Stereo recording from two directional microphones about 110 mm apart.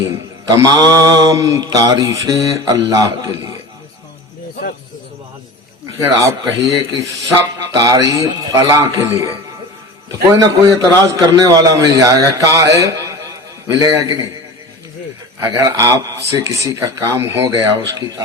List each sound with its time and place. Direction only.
0.1 s mantra: 30° right (ahead or behind)
6.1 s speech: 35° right (ahead or behind)
10.1 s mantra: 35° right (ahead or behind)
15.4 s speech: 25° right (ahead or behind)